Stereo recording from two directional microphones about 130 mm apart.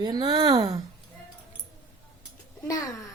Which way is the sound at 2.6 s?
25° left (ahead or behind).